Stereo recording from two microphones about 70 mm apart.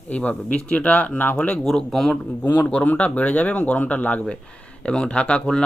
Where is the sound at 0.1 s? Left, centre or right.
Left.